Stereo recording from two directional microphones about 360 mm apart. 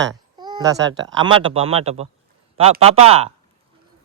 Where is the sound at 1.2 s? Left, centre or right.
Centre.